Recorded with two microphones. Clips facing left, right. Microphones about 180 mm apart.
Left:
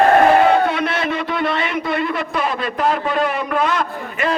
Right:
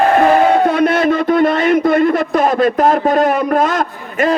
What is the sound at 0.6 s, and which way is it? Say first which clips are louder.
A man's voice: right 8 dB; 45° right (ahead or behind).